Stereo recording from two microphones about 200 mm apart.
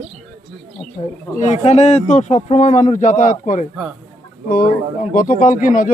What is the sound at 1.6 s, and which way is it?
A man's voice, 30° left (ahead or behind).